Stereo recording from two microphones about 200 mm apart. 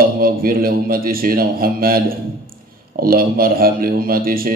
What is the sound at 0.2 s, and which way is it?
A man's voice, 45° right (ahead or behind).